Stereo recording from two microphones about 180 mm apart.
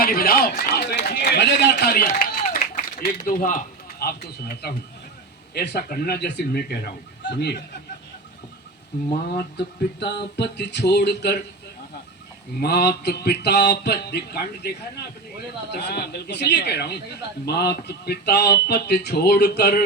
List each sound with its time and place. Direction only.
0.0 s speech: 55° left (ahead or behind)
2.0 s a sound: 50° left (ahead or behind)
3.0 s a man's voice: 50° left (ahead or behind)
4.0 s speech: 65° left (ahead or behind)
10.0 s speech: 70° left (ahead or behind)
12.5 s speech: 65° left (ahead or behind)
15.7 s speech: 65° left (ahead or behind)